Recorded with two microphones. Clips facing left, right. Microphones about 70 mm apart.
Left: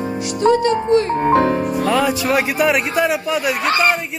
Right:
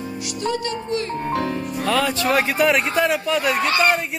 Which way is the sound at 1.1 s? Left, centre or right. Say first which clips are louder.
Left 9 dB; left.